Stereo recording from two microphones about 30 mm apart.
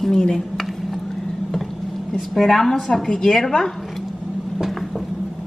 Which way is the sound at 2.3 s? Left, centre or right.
Centre.